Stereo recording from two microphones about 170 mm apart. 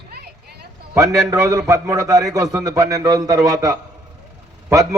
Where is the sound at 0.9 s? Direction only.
20° right (ahead or behind).